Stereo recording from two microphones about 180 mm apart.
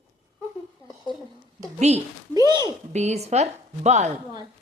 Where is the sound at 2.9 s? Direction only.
40° right (ahead or behind).